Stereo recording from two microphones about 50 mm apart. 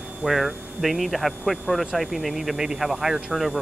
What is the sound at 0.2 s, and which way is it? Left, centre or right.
Speech, centre.